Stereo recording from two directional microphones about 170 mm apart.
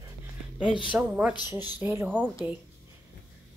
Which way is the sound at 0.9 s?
10° right (ahead or behind).